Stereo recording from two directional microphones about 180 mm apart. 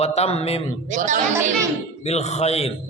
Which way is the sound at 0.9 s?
45° right (ahead or behind).